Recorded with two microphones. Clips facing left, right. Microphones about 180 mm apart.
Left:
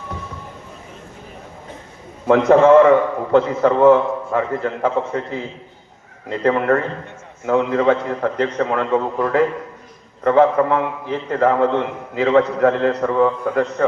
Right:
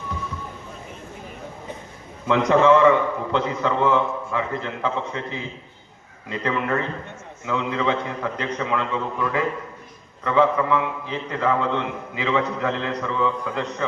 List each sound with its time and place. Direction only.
2.5 s a man's voice: 50° left (ahead or behind)